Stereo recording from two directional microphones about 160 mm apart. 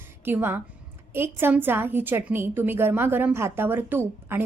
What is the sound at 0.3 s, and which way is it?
A woman's voice, 15° right (ahead or behind).